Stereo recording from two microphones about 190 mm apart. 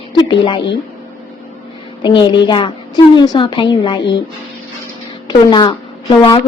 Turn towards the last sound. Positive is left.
turn(degrees=25)  # may be behind; listen again after turning